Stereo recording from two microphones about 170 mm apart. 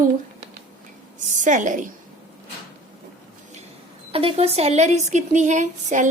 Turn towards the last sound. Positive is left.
turn(degrees=-45)  # may be behind; listen again after turning